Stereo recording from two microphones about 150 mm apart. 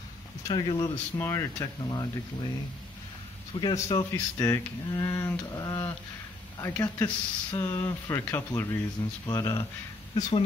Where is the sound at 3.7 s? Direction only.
20° left (ahead or behind).